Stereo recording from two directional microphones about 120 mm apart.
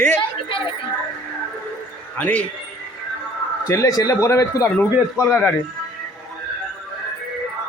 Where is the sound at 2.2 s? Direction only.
10° left (ahead or behind).